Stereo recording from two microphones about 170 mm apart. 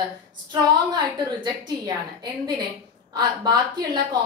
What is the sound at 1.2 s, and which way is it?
Speech, 25° right (ahead or behind).